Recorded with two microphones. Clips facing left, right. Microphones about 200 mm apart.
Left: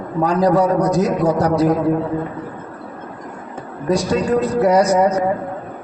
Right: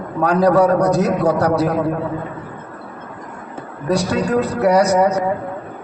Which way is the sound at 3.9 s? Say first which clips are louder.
Left 1 dB; 65° right (ahead or behind).